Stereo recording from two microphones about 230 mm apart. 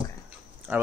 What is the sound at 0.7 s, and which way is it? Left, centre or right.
Speech, centre.